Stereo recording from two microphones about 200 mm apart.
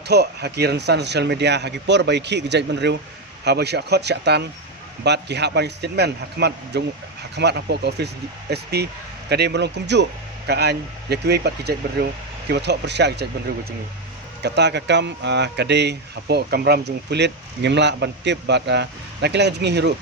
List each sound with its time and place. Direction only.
0.1 s speech: 55° right (ahead or behind)
14.4 s speech: 60° right (ahead or behind)